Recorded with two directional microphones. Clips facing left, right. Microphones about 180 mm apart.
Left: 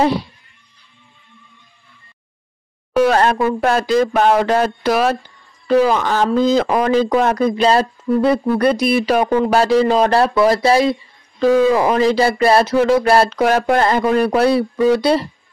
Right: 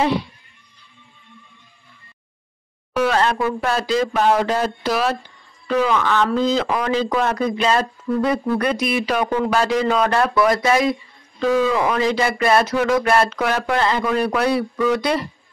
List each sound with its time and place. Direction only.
3.0 s a sound: 45° left (ahead or behind)
3.6 s speech: 50° left (ahead or behind)
5.7 s speech: 35° left (ahead or behind)